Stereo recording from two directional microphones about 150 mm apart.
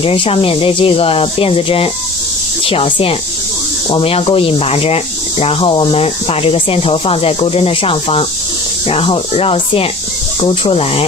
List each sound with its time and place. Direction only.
0.0 s speech: 40° left (ahead or behind)